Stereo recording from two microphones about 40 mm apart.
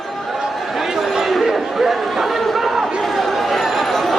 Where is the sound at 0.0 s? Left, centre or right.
Centre.